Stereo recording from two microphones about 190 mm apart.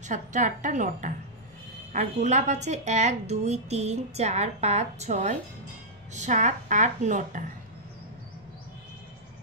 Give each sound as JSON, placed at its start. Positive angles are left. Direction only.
{"t": 0.1, "sound": "a woman's voice", "side_deg": -40}